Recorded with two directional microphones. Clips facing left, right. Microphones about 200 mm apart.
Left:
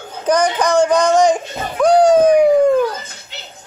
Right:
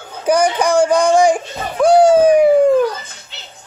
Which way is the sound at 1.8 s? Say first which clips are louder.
Right 1 dB; 10° right (ahead or behind).